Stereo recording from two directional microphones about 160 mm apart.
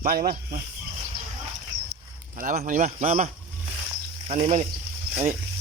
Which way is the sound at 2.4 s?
55° right (ahead or behind).